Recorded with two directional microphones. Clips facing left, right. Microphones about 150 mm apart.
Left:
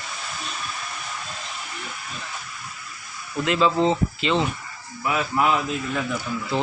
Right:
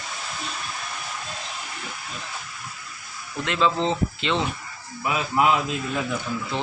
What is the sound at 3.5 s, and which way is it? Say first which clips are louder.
Speech: left 3 dB; 5° left (ahead or behind).